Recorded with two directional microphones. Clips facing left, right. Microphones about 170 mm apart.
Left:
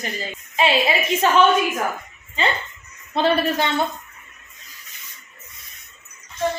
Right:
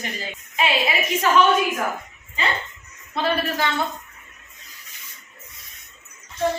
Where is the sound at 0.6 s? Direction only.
30° left (ahead or behind).